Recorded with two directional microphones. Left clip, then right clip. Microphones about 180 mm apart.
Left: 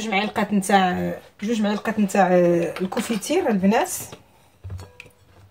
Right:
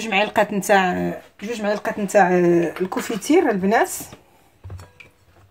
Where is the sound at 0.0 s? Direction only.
40° right (ahead or behind).